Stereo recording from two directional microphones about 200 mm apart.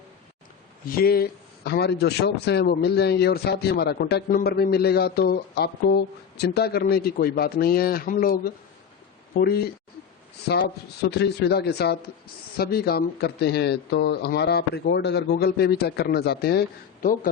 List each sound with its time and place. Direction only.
0.9 s speech: 50° left (ahead or behind)
11.0 s a man's voice: 55° left (ahead or behind)